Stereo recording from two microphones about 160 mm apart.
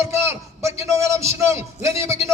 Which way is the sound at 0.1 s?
15° right (ahead or behind).